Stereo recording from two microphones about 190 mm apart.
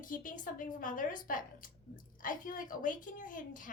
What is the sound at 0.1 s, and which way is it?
A woman's voice, 45° left (ahead or behind).